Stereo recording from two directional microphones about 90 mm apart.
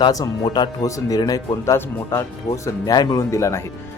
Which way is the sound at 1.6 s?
30° left (ahead or behind).